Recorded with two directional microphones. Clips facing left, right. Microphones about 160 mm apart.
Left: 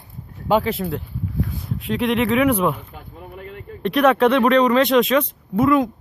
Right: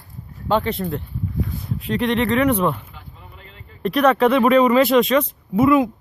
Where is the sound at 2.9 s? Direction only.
50° left (ahead or behind).